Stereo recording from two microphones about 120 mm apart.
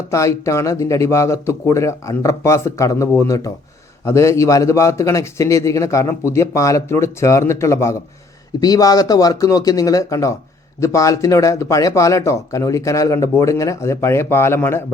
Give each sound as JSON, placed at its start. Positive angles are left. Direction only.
{"t": 0.1, "sound": "speech", "side_deg": 25}